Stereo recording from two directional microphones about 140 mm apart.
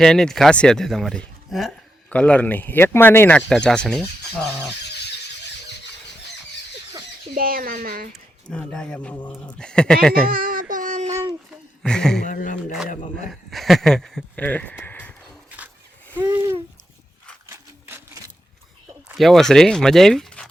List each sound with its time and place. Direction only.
0.0 s speech: 5° left (ahead or behind)
7.3 s speech: 90° right
8.4 s speech: 5° left (ahead or behind)
10.2 s child singing: 90° right; by 11.3 s 55° right (ahead or behind)
11.8 s speech: 5° left (ahead or behind)
12.2 s a sound: 75° left (ahead or behind)
13.5 s speech: centre (ahead or behind)
16.3 s a sound: 20° right (ahead or behind)
17.5 s sewing machine: 20° right (ahead or behind)
19.1 s speech: centre (ahead or behind)